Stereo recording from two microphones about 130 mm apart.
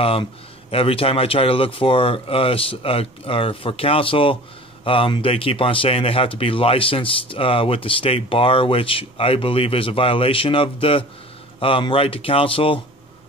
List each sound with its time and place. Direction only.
0.0 s speech: 45° left (ahead or behind)